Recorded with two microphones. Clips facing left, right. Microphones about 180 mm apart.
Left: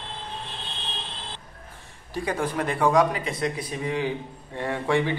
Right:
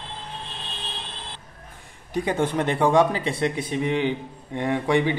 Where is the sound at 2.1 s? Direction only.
25° right (ahead or behind).